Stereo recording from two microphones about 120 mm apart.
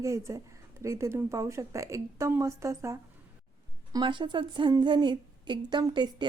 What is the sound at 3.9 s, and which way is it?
A woman's voice, 40° right (ahead or behind).